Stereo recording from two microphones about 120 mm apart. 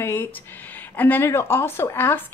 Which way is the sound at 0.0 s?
20° left (ahead or behind).